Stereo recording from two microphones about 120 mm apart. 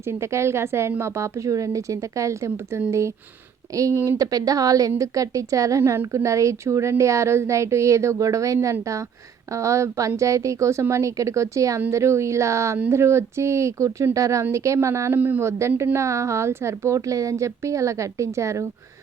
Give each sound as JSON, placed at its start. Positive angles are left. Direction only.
{"t": 0.1, "sound": "a woman's voice", "side_deg": -20}